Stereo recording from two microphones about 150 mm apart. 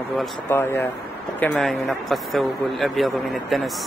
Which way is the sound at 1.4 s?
Centre (ahead or behind).